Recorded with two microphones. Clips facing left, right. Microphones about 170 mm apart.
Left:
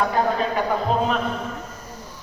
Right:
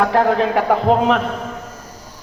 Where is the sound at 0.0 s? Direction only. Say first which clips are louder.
Right 6 dB; 75° right (ahead or behind).